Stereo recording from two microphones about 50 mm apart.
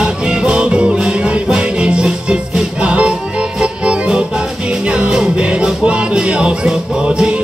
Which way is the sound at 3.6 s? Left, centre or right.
Right.